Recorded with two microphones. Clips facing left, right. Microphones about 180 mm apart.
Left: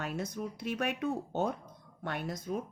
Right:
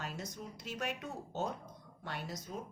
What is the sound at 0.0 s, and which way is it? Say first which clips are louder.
A woman's voice: left 7 dB; 60° left (ahead or behind).